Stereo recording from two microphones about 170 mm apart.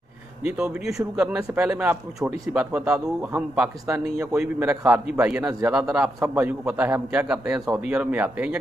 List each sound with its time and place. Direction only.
0.5 s a man's voice: 5° right (ahead or behind)
5.4 s a man's voice: 20° right (ahead or behind)
5.7 s a man's voice: 5° right (ahead or behind)